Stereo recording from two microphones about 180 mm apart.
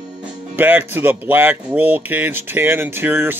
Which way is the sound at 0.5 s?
10° right (ahead or behind).